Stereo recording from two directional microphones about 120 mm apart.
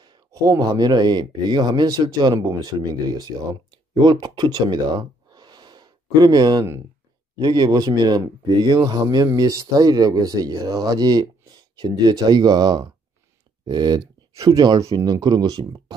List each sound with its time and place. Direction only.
0.3 s speech: 25° right (ahead or behind)
0.7 s speech: 35° right (ahead or behind)